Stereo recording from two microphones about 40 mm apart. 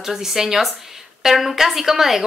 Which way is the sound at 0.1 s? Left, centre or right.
Centre.